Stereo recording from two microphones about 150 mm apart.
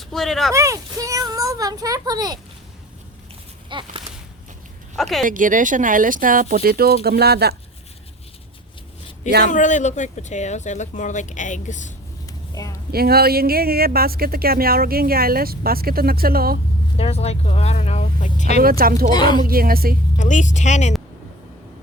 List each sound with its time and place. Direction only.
0.0 s speech: centre (ahead or behind)
0.5 s a child's voice: 20° right (ahead or behind)
3.7 s a sound: 30° right (ahead or behind)
4.9 s speech: centre (ahead or behind)
5.2 s speech: 60° right (ahead or behind); by 7.5 s 90° right
9.5 s speech: 55° left (ahead or behind)
12.2 s a sound: 25° left (ahead or behind)
12.9 s speech: 90° right
17.0 s speech: 45° left (ahead or behind)
18.6 s speech: 80° right
19.1 s speech: 30° left (ahead or behind)
19.4 s speech: 75° right (ahead or behind)
20.1 s speech: 55° left (ahead or behind)